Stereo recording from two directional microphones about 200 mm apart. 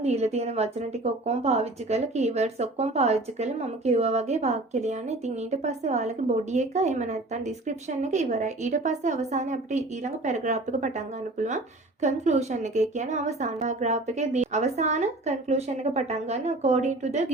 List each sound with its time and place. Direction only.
0.0 s a woman's voice: 35° right (ahead or behind)